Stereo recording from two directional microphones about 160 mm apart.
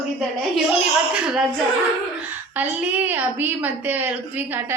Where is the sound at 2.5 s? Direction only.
10° right (ahead or behind).